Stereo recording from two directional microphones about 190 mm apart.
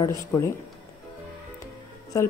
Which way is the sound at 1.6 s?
15° left (ahead or behind).